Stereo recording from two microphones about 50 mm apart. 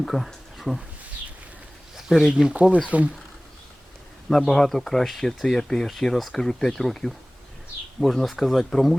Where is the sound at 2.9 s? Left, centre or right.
Right.